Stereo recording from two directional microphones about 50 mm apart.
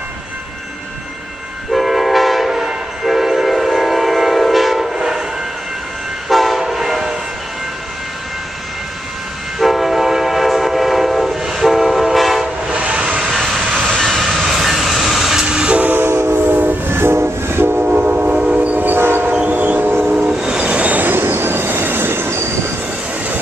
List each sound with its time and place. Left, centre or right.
1.7 s train: centre
6.2 s train: centre
9.6 s train: centre
12.6 s train: right
13.3 s vehicle: centre
13.8 s train: centre
15.4 s train: centre
15.9 s train: right
16.4 s train: right
17.8 s train: right
18.9 s train: right
19.5 s music: right
20.2 s train: centre
21.0 s train: right